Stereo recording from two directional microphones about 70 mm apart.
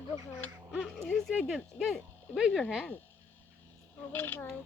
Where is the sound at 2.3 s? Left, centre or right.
Centre.